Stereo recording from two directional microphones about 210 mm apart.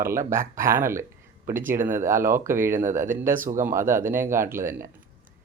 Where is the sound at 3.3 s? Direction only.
40° right (ahead or behind).